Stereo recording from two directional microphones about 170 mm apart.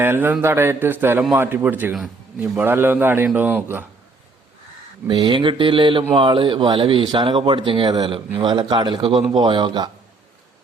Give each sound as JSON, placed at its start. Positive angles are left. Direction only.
{"t": 0.0, "sound": "a man's voice", "side_deg": -10}
{"t": 5.0, "sound": "speech", "side_deg": -25}